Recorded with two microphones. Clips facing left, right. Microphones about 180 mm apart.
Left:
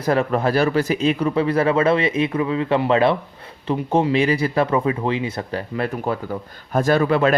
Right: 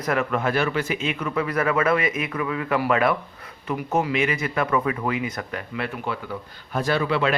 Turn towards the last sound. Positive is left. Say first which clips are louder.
# left 5 dB
turn(degrees=45)  # may be behind; listen again after turning